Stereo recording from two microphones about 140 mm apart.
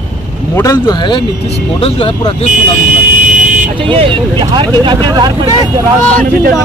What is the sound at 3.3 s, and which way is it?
Vehicle, 65° right (ahead or behind).